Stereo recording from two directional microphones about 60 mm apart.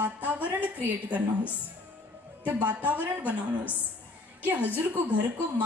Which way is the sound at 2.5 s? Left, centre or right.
Right.